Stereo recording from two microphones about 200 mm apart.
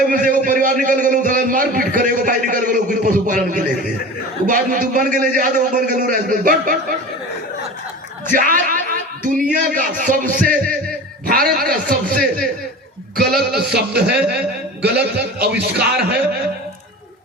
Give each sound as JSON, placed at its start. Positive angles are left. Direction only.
{"t": 0.1, "sound": "a man's voice", "side_deg": -40}
{"t": 8.4, "sound": "a man's voice", "side_deg": -45}